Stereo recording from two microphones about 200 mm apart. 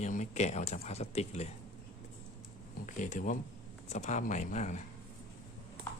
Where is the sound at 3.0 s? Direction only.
40° left (ahead or behind).